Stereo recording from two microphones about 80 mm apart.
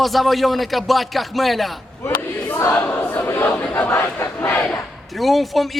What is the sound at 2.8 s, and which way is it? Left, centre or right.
Choir, left.